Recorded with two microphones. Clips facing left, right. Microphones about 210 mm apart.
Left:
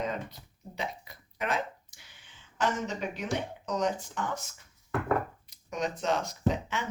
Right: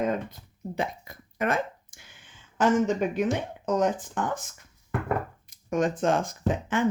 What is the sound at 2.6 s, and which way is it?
Speech, 50° right (ahead or behind).